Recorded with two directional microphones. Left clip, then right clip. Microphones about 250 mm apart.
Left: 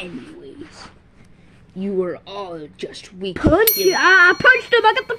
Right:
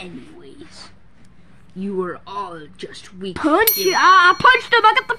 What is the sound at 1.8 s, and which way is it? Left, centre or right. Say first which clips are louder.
Speech: left 2 dB; centre.